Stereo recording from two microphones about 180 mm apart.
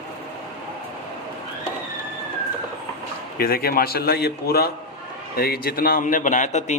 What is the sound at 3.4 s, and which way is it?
A man's voice, 55° left (ahead or behind).